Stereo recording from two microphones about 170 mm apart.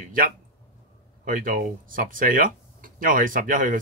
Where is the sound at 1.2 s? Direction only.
55° right (ahead or behind).